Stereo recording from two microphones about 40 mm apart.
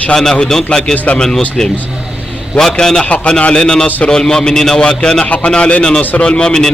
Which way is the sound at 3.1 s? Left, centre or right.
Left.